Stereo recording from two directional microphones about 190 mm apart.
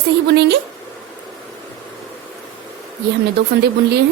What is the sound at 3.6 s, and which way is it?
Speech, 60° right (ahead or behind).